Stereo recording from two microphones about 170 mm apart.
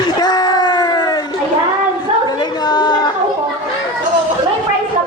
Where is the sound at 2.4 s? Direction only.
25° left (ahead or behind).